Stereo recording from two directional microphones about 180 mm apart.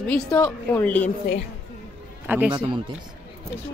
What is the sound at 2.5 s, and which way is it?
Speech, 25° right (ahead or behind).